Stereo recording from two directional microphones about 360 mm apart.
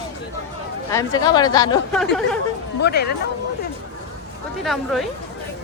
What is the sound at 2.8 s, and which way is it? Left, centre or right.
Speech, left.